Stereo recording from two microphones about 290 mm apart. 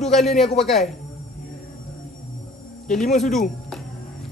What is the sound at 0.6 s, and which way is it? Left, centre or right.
Speech, centre.